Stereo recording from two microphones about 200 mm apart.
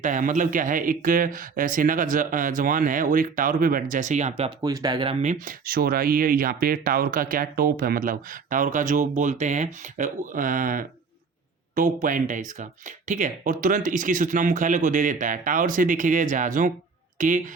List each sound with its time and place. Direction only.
0.0 s speech: 40° right (ahead or behind)
4.4 s speech: 20° right (ahead or behind)
5.2 s speech: 40° right (ahead or behind)